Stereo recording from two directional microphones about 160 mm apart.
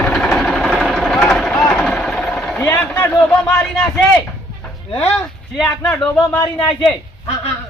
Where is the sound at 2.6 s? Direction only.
20° left (ahead or behind).